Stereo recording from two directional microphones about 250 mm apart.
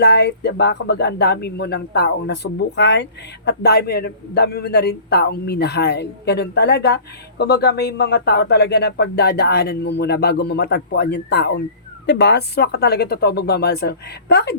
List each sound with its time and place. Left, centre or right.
0.0 s speech: left